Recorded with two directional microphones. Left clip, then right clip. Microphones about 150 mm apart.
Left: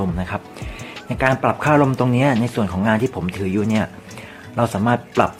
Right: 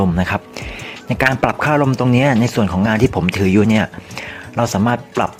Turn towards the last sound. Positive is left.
turn(degrees=-45)  # may be behind; listen again after turning